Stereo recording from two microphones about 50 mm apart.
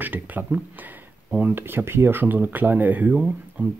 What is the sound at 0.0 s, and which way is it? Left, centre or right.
Speech, right.